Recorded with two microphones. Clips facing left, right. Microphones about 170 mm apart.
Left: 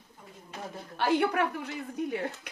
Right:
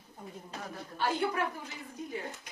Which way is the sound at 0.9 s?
70° left (ahead or behind).